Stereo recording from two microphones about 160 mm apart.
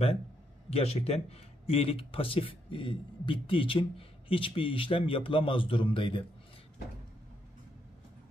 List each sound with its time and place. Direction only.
0.7 s a man's voice: 40° left (ahead or behind)